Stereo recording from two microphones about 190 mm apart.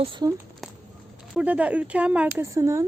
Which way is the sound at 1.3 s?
5° right (ahead or behind).